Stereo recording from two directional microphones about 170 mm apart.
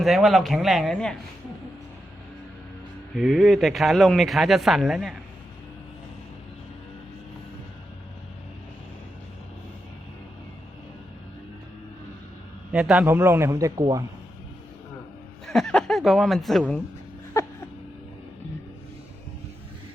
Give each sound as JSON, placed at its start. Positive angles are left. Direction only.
{"t": 0.0, "sound": "speech", "side_deg": 0}
{"t": 3.2, "sound": "speech", "side_deg": -5}
{"t": 12.7, "sound": "a man's voice", "side_deg": -5}
{"t": 13.7, "sound": "speech", "side_deg": -30}
{"t": 15.4, "sound": "speech", "side_deg": 0}
{"t": 17.4, "sound": "a sound", "side_deg": 15}